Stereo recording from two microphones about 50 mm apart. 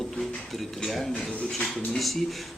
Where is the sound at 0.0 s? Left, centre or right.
Centre.